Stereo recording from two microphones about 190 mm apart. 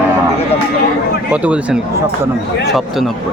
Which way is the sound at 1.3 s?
5° right (ahead or behind).